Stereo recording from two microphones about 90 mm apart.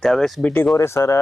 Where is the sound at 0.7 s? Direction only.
30° left (ahead or behind).